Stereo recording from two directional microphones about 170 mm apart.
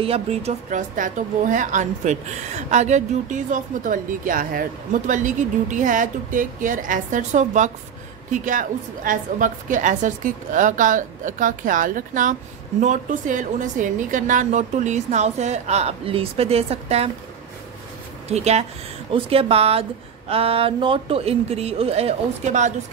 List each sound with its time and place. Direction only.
0.0 s a woman's voice: 35° right (ahead or behind)
18.3 s speech: 40° right (ahead or behind)